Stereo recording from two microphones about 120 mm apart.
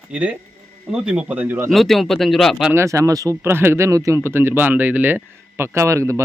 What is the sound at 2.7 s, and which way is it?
Speech, 25° right (ahead or behind).